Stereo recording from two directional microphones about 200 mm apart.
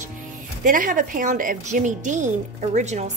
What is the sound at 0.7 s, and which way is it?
Speech, 40° right (ahead or behind).